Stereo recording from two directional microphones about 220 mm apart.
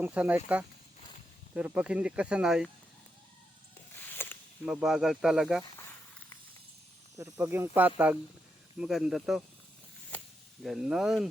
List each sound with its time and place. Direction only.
0.0 s speech: 5° right (ahead or behind)
4.0 s a sound: 10° left (ahead or behind)
4.6 s speech: 5° right (ahead or behind)
7.2 s speech: 10° right (ahead or behind)
10.1 s snake: 5° left (ahead or behind)
10.6 s speech: centre (ahead or behind)